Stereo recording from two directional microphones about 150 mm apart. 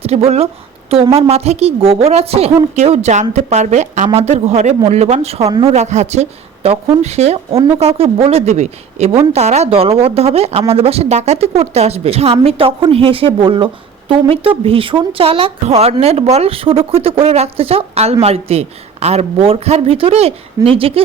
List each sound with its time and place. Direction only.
0.0 s a woman's voice: 45° right (ahead or behind)